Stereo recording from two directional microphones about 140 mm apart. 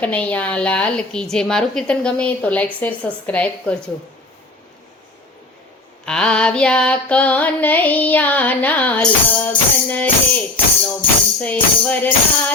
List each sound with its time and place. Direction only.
0.0 s music: 10° left (ahead or behind)
6.1 s music: 5° left (ahead or behind)